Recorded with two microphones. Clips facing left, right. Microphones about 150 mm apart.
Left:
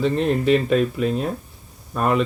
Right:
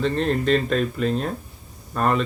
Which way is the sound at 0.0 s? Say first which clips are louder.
Left 2 dB; 5° left (ahead or behind).